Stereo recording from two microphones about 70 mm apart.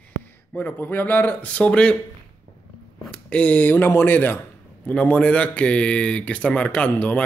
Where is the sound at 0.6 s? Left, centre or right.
Left.